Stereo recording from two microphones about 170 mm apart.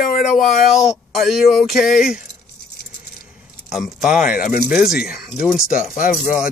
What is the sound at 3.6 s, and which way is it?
Speech, centre (ahead or behind).